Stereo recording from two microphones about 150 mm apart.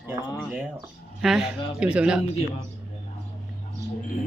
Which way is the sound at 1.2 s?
Centre (ahead or behind).